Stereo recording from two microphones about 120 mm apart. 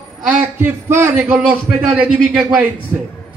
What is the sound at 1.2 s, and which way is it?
A man's voice, 10° right (ahead or behind).